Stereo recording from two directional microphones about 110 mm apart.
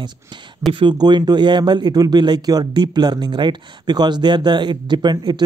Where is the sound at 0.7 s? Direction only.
40° right (ahead or behind).